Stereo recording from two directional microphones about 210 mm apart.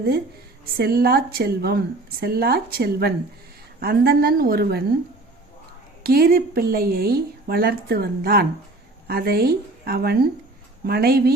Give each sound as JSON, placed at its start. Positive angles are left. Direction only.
{"t": 0.8, "sound": "speech", "side_deg": -50}
{"t": 6.0, "sound": "speech", "side_deg": -45}